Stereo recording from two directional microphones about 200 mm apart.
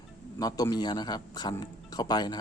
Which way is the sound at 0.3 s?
20° left (ahead or behind).